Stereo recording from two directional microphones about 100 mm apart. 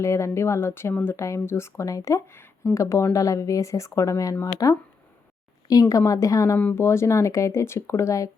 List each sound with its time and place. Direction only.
0.0 s a woman's voice: 30° left (ahead or behind)
6.6 s speech: 15° left (ahead or behind)
6.8 s speech: 25° left (ahead or behind)